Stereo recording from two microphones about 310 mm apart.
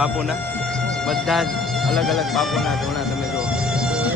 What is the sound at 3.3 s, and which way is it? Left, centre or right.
Music, centre.